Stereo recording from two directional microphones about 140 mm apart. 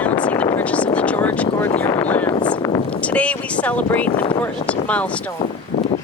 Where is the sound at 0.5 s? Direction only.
10° left (ahead or behind).